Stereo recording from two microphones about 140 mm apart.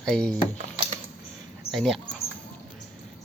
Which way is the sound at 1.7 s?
Centre (ahead or behind).